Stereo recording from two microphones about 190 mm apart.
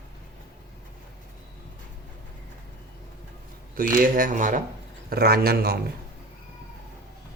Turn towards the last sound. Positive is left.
turn(degrees=-55)  # may be behind; listen again after turning